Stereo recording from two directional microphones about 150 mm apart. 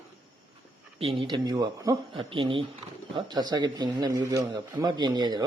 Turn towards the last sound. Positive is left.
turn(degrees=-25)  # may be behind; listen again after turning